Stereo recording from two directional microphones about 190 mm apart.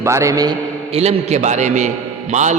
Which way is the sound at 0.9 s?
35° right (ahead or behind).